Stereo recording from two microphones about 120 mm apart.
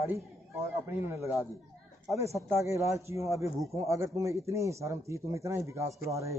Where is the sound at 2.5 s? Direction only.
25° right (ahead or behind).